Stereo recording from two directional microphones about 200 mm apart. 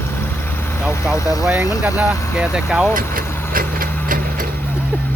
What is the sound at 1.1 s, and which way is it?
Speech, 15° left (ahead or behind).